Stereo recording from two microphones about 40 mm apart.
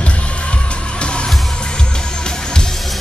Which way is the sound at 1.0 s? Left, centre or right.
Left.